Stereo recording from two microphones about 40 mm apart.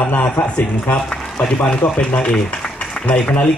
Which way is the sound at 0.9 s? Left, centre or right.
Left.